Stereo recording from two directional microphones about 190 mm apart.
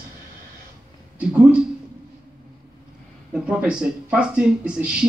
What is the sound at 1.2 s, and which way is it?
Speech, 5° right (ahead or behind).